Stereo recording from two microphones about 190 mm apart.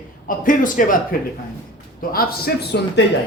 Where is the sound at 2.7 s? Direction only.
60° left (ahead or behind).